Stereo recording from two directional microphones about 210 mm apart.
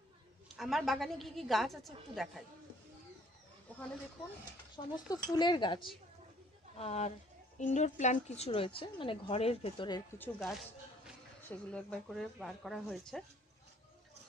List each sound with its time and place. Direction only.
0.6 s a woman's voice: centre (ahead or behind)
4.7 s a woman's voice: 20° left (ahead or behind)
6.8 s a woman's voice: 30° left (ahead or behind)
11.4 s a woman's voice: 5° left (ahead or behind)